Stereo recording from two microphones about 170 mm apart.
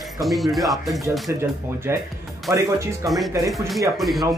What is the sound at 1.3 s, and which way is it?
Speech, 15° right (ahead or behind).